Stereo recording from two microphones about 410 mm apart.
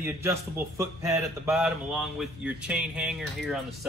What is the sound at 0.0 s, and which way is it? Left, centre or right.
A man's voice, centre.